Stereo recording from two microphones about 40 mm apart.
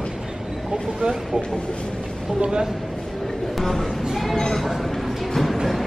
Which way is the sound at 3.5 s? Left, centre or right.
Centre.